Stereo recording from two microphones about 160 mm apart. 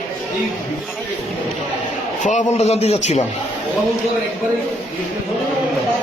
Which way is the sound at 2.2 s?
45° left (ahead or behind).